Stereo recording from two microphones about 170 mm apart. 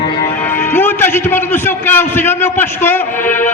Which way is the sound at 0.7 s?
10° left (ahead or behind).